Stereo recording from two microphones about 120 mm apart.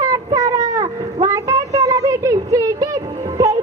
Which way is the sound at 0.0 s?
30° right (ahead or behind).